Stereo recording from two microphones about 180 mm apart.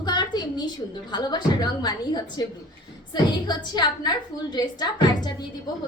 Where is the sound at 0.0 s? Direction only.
25° left (ahead or behind).